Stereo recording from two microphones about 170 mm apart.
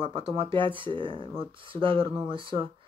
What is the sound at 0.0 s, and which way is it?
Speech, 30° right (ahead or behind).